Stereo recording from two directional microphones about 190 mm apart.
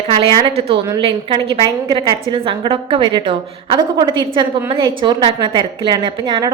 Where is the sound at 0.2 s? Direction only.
25° right (ahead or behind).